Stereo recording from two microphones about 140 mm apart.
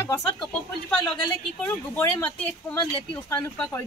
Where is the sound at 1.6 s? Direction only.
15° left (ahead or behind).